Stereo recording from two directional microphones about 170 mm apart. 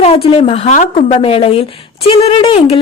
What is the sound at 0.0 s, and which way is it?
Speech, 35° left (ahead or behind).